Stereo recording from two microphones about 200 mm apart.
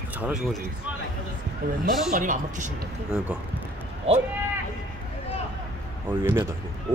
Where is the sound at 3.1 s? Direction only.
5° right (ahead or behind).